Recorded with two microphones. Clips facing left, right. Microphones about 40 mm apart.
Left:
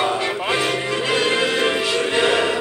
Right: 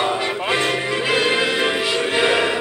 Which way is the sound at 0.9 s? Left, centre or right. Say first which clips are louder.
Right 1 dB; centre.